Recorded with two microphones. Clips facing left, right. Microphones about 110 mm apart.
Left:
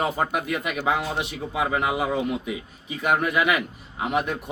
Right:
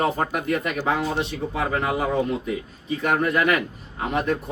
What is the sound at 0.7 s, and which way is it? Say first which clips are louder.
Speech: right 1 dB; 15° left (ahead or behind).